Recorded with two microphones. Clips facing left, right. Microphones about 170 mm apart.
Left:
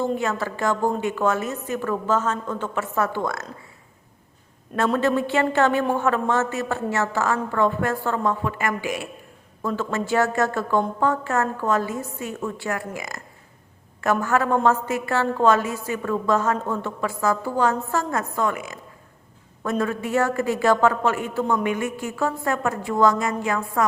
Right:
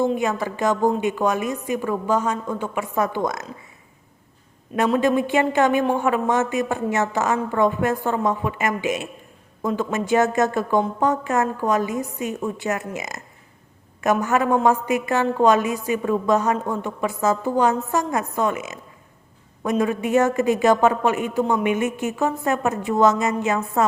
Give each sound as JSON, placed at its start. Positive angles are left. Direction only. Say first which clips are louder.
{"t": 0.0, "sound": "a woman's voice", "louder": "right 3 dB", "side_deg": -15}
{"t": 4.9, "sound": "a woman's voice", "louder": "right 2 dB", "side_deg": -15}
{"t": 19.8, "sound": "a woman's voice", "louder": "right 4 dB", "side_deg": -20}